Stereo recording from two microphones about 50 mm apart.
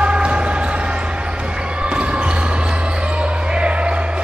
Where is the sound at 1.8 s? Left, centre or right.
Right.